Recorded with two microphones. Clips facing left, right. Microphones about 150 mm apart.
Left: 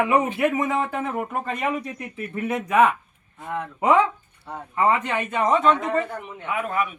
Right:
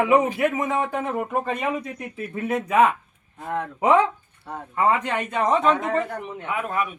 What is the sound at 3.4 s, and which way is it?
Speech, 45° right (ahead or behind).